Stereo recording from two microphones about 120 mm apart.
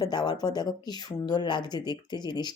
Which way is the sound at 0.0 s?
35° left (ahead or behind).